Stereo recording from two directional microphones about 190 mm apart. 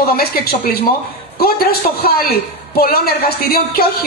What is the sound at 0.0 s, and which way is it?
A woman's voice, 50° left (ahead or behind).